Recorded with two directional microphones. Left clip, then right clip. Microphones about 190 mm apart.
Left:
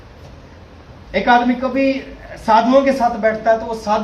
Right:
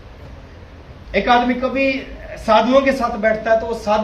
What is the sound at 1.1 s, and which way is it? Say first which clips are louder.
A man's voice: left 1 dB; 45° left (ahead or behind).